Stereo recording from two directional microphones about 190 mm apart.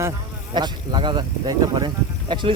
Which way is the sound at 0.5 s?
25° right (ahead or behind).